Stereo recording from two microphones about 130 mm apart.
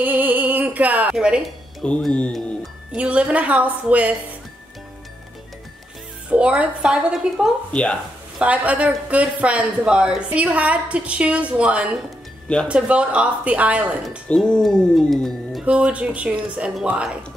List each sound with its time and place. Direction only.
0.0 s a sound: 15° right (ahead or behind)
1.9 s speech: 5° left (ahead or behind)
2.9 s speech: 10° right (ahead or behind)
6.3 s speech: 10° right (ahead or behind)
7.7 s speech: 5° left (ahead or behind)
8.4 s speech: 10° right (ahead or behind)
14.3 s speech: 5° left (ahead or behind)